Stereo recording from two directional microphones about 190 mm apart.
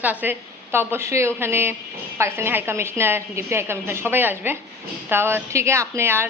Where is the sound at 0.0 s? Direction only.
10° right (ahead or behind).